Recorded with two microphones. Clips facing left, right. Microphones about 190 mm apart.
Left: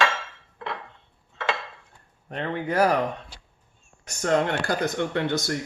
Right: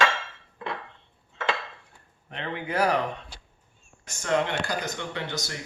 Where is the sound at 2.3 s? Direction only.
45° left (ahead or behind).